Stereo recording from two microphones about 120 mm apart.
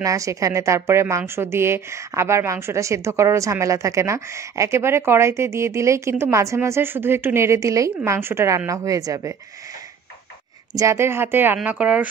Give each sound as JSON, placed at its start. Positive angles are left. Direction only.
{"t": 0.0, "sound": "a woman's voice", "side_deg": -25}
{"t": 10.7, "sound": "speech", "side_deg": -25}